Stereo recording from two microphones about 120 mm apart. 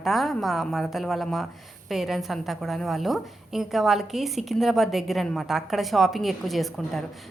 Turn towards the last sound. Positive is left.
turn(degrees=0)  # may be behind; listen again after turning